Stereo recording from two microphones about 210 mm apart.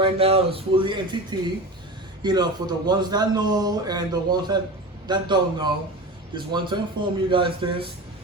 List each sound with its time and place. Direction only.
0.0 s a man's voice: 30° right (ahead or behind)